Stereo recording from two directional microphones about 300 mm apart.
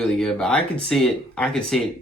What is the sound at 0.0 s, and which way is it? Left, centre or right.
Speech, centre.